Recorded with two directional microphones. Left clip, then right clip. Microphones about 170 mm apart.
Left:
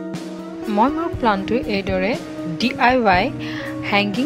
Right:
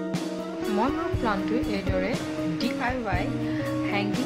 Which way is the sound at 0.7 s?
40° left (ahead or behind).